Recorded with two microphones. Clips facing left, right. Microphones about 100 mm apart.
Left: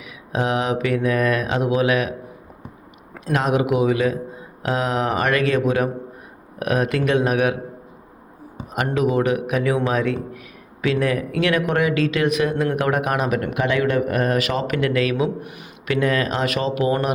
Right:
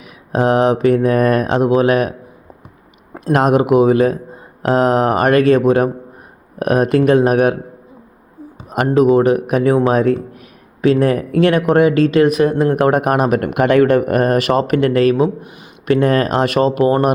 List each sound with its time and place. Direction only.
0.3 s a man's voice: 40° right (ahead or behind)
3.3 s a man's voice: 50° right (ahead or behind)
8.7 s a man's voice: 40° right (ahead or behind)